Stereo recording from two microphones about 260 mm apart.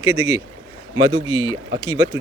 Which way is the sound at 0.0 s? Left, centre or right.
Centre.